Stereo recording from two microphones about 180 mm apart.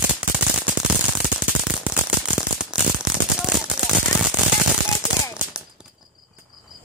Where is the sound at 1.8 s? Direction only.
5° right (ahead or behind).